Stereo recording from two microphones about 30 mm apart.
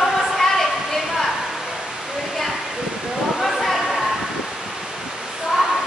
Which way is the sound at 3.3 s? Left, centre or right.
Centre.